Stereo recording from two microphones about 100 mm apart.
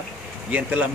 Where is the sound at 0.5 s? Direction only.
15° right (ahead or behind).